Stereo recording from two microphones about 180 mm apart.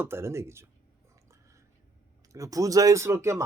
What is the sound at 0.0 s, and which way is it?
Speech, 15° right (ahead or behind).